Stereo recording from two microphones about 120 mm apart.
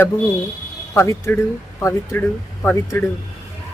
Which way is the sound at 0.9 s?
20° left (ahead or behind).